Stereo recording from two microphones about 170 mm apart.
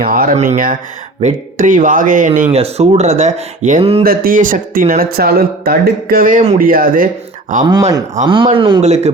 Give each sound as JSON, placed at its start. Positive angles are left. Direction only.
{"t": 0.0, "sound": "speech", "side_deg": -60}
{"t": 2.6, "sound": "speech", "side_deg": -35}
{"t": 4.0, "sound": "speech", "side_deg": -60}
{"t": 8.5, "sound": "speech", "side_deg": -30}